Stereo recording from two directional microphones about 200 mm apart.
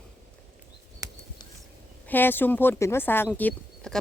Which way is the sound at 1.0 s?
15° right (ahead or behind).